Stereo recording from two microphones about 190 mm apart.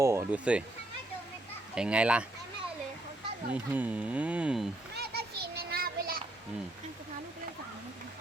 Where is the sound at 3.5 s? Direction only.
10° right (ahead or behind).